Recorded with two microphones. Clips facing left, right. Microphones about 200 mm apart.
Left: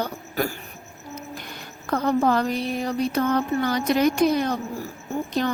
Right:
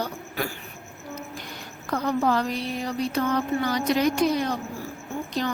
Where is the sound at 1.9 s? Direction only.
50° left (ahead or behind).